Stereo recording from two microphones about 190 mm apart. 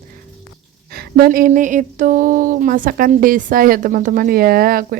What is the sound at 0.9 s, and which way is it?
Speech, 55° right (ahead or behind).